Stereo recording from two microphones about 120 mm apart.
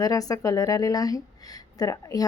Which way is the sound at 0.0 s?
30° left (ahead or behind).